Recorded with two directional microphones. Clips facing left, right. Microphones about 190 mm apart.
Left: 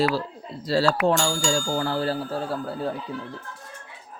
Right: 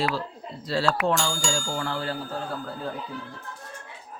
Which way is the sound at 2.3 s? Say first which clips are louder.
Left 4 dB; 30° left (ahead or behind).